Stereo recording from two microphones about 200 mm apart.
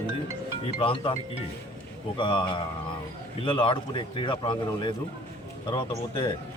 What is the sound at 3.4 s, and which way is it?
A man's voice, 25° left (ahead or behind).